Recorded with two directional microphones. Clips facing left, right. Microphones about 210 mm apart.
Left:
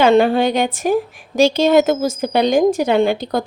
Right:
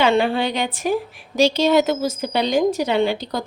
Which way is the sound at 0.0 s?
45° left (ahead or behind).